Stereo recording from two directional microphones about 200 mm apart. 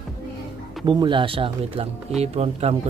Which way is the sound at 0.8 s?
25° right (ahead or behind).